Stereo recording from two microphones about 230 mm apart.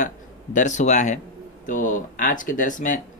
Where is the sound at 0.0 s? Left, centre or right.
Left.